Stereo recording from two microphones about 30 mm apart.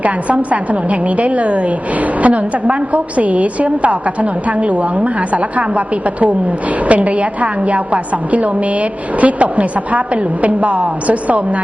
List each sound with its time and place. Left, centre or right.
0.0 s a woman's voice: right